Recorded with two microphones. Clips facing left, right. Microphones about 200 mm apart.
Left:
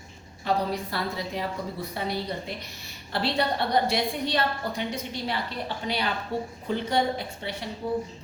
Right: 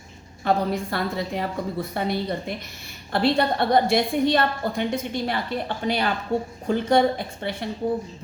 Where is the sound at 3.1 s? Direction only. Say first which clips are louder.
Right 5 dB; 50° right (ahead or behind).